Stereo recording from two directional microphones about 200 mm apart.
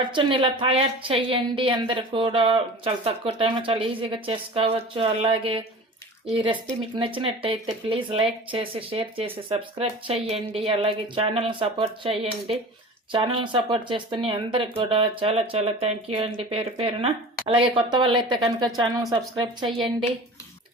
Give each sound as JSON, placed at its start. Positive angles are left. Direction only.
{"t": 0.1, "sound": "a woman's voice", "side_deg": -25}